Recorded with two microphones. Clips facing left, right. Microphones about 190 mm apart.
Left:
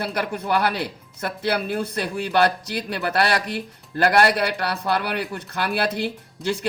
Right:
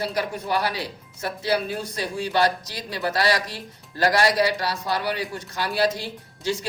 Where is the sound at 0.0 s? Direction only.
60° left (ahead or behind).